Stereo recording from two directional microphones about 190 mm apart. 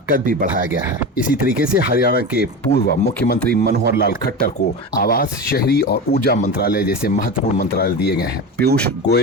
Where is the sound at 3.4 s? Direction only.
55° right (ahead or behind).